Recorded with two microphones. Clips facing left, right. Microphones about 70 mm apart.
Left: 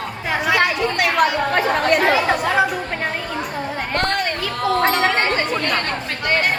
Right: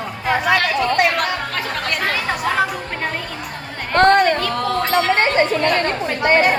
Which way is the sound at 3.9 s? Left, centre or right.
Right.